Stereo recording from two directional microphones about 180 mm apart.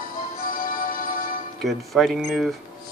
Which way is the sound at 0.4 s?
50° left (ahead or behind).